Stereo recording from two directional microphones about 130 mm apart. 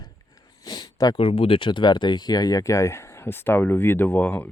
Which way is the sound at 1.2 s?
45° left (ahead or behind).